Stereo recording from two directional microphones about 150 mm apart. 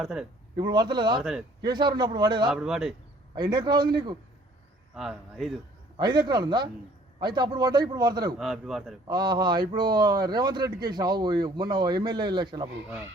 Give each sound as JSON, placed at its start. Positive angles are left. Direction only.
{"t": 0.0, "sound": "a man's voice", "side_deg": -5}
{"t": 0.5, "sound": "speech", "side_deg": -30}
{"t": 1.2, "sound": "a man's voice", "side_deg": 0}
{"t": 1.6, "sound": "speech", "side_deg": -30}
{"t": 2.5, "sound": "a man's voice", "side_deg": -5}
{"t": 3.3, "sound": "speech", "side_deg": -30}
{"t": 4.9, "sound": "a man's voice", "side_deg": 0}
{"t": 6.0, "sound": "speech", "side_deg": -30}
{"t": 8.4, "sound": "a man's voice", "side_deg": 0}
{"t": 9.0, "sound": "speech", "side_deg": -30}